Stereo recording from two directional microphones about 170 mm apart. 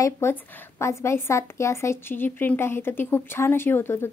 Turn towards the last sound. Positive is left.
turn(degrees=15)  # may be behind; listen again after turning